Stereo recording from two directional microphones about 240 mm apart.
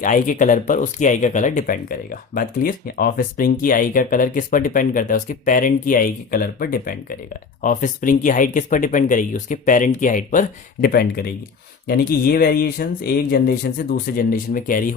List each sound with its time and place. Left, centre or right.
0.0 s speech: left